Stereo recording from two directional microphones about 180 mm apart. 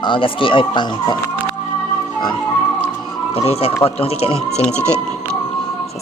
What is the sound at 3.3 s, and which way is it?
Speech, 35° left (ahead or behind).